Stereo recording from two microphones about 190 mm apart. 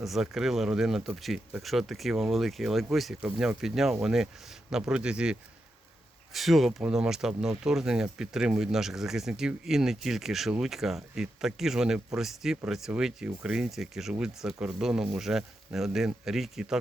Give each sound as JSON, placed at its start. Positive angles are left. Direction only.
{"t": 0.0, "sound": "speech", "side_deg": 0}